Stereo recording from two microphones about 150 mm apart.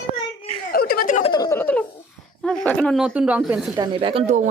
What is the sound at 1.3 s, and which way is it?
Speech, 25° left (ahead or behind).